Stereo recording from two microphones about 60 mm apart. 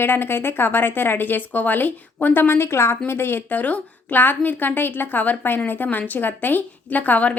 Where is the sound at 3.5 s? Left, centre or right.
Left.